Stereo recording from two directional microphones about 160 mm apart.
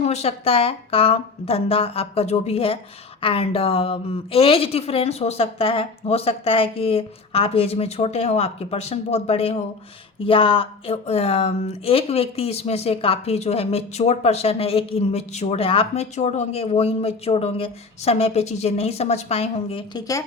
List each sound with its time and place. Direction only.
0.0 s speech: 40° left (ahead or behind)
19.9 s speech: 25° left (ahead or behind)